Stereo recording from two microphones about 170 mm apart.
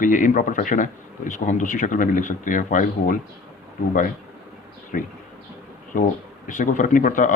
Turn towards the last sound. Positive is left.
turn(degrees=50)  # may be behind; listen again after turning